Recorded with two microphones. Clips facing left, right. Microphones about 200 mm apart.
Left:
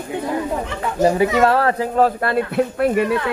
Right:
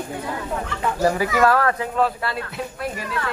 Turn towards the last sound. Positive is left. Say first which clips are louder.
# left 12 dB
turn(degrees=60)  # may be behind; listen again after turning